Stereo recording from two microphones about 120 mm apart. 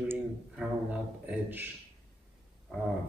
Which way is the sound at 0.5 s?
10° right (ahead or behind).